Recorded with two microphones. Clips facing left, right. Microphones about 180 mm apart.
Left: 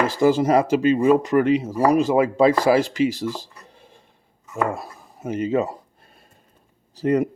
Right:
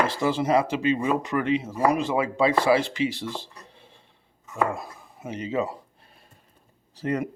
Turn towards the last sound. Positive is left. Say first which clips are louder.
# left 7 dB
turn(degrees=40)  # may be behind; listen again after turning